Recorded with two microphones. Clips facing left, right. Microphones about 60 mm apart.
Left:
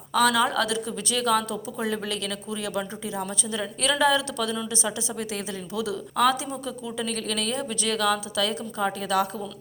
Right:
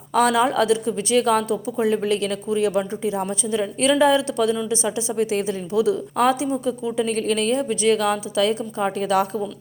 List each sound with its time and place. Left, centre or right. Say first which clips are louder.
0.1 s speech: right 4 dB; right